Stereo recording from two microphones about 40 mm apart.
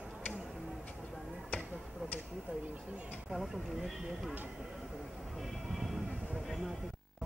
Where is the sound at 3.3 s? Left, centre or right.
Centre.